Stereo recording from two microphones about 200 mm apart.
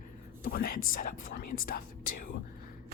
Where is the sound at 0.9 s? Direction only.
45° left (ahead or behind).